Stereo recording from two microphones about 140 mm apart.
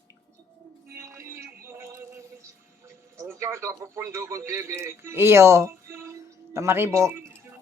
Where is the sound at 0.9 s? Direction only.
20° right (ahead or behind).